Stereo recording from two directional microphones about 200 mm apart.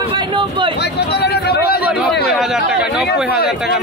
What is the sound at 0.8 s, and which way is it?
Speech, 55° left (ahead or behind).